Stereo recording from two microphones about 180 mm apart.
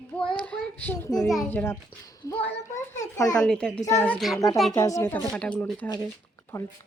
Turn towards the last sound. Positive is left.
turn(degrees=15)  # may be behind; listen again after turning